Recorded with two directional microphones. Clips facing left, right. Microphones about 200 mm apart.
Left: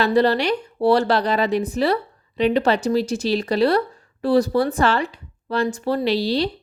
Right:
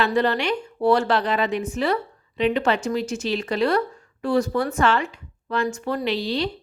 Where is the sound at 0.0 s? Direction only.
35° left (ahead or behind).